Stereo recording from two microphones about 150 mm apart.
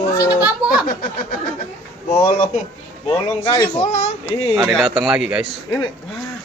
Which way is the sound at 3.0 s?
40° left (ahead or behind).